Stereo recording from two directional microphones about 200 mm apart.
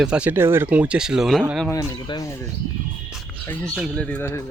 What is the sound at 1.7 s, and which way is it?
Speech, 15° left (ahead or behind).